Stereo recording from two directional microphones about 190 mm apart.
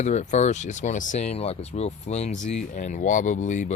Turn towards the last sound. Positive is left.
turn(degrees=40)  # may be behind; listen again after turning